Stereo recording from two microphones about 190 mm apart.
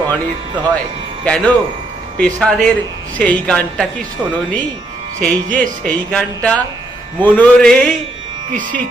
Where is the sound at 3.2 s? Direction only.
5° left (ahead or behind).